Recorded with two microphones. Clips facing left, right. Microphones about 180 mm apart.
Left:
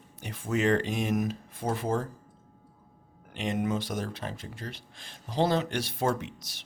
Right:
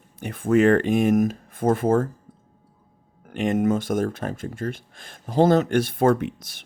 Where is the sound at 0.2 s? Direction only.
55° right (ahead or behind).